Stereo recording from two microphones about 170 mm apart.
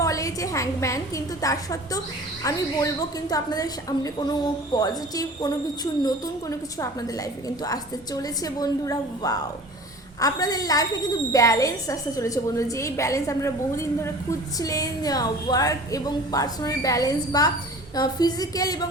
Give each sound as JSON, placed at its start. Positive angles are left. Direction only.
{"t": 0.0, "sound": "a woman's voice", "side_deg": 20}